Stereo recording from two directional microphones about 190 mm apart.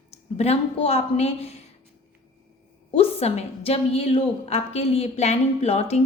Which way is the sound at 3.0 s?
35° left (ahead or behind).